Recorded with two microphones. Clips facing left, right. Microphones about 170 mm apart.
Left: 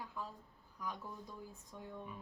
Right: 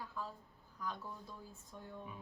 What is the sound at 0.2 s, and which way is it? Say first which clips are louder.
Speech: right 1 dB; 15° left (ahead or behind).